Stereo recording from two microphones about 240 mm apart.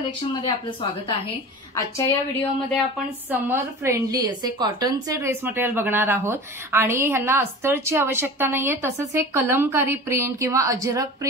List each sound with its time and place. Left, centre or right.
0.4 s a woman's voice: centre
3.3 s a woman's voice: centre